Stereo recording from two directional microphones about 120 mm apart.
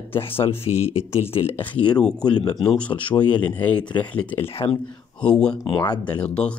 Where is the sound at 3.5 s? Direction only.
15° left (ahead or behind).